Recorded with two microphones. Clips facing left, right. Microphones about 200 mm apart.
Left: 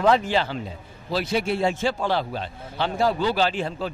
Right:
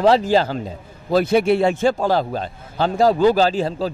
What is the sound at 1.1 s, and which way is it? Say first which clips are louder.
Speech: right 9 dB; 55° right (ahead or behind).